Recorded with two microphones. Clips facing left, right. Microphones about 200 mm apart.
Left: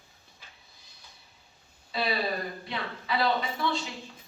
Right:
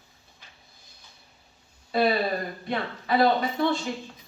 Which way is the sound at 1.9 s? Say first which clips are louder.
Right 6 dB; 50° right (ahead or behind).